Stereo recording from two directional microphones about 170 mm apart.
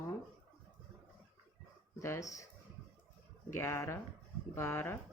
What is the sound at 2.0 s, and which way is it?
Speech, 15° left (ahead or behind).